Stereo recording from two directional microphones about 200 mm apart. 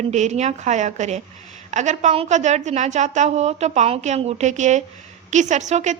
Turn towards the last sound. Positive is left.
turn(degrees=-35)  # may be behind; listen again after turning